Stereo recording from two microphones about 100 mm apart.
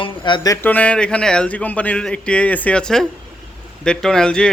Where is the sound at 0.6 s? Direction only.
15° left (ahead or behind).